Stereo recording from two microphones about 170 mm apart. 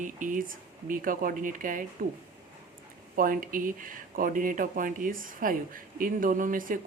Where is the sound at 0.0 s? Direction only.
50° right (ahead or behind).